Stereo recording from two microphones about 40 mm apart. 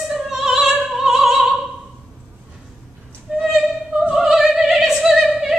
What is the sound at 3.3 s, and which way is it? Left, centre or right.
Opera, centre.